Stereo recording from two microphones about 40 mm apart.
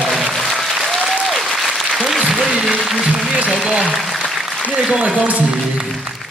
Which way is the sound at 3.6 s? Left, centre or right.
Centre.